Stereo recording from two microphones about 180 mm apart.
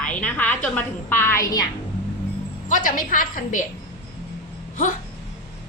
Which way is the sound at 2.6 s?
50° left (ahead or behind).